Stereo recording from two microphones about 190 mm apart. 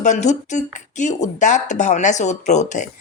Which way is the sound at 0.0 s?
40° left (ahead or behind).